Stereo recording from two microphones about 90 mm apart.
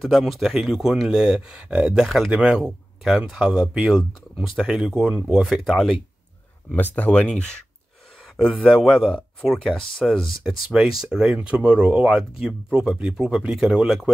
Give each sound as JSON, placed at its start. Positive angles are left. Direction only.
{"t": 0.0, "sound": "speech", "side_deg": 0}
{"t": 2.0, "sound": "speech", "side_deg": 0}
{"t": 4.9, "sound": "speech", "side_deg": -20}
{"t": 5.2, "sound": "speech", "side_deg": -10}
{"t": 6.7, "sound": "speech", "side_deg": 15}
{"t": 8.6, "sound": "speech", "side_deg": 5}
{"t": 10.7, "sound": "speech", "side_deg": -5}